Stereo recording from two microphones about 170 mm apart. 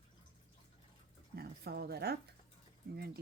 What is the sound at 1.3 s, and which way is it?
Speech, 65° right (ahead or behind).